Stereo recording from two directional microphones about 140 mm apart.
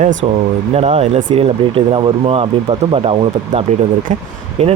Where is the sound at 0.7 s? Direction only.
50° right (ahead or behind).